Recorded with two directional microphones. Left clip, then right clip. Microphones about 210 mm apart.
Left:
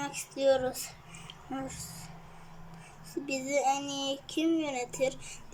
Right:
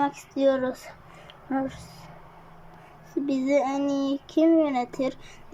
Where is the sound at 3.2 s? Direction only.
20° right (ahead or behind).